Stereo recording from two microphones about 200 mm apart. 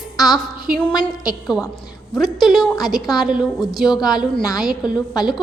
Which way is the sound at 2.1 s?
Centre (ahead or behind).